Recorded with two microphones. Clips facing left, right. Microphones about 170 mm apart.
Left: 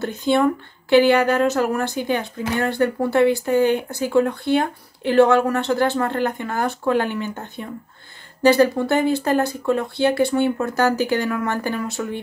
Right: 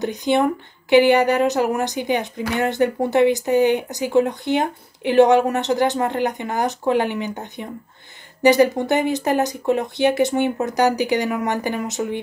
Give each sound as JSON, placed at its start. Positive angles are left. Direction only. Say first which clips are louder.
{"t": 0.0, "sound": "a woman's voice", "louder": "even", "side_deg": -15}